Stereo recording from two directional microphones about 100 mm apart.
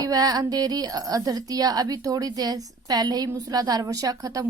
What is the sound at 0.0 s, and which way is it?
A woman's voice, 40° right (ahead or behind).